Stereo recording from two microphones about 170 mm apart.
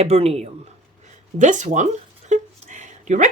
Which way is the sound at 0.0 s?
35° right (ahead or behind).